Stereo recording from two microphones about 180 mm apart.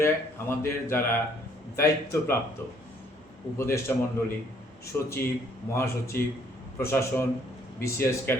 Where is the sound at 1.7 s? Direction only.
15° left (ahead or behind).